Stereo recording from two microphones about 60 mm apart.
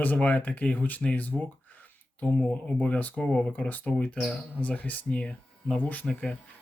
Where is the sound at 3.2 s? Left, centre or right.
Centre.